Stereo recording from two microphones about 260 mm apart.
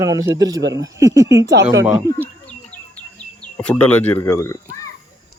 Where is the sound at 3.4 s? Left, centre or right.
Centre.